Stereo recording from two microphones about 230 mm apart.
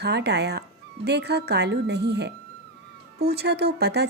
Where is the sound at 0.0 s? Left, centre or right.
Right.